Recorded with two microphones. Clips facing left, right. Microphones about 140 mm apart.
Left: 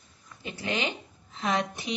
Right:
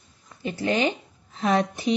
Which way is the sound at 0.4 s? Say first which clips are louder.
Right 7 dB; 40° right (ahead or behind).